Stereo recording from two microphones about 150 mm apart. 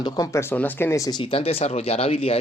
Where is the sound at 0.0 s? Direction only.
25° left (ahead or behind).